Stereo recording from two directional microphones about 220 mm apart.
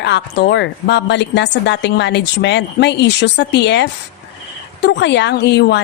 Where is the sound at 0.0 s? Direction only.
50° left (ahead or behind).